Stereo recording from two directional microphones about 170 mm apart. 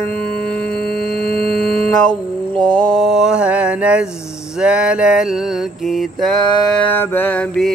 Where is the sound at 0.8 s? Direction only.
65° left (ahead or behind).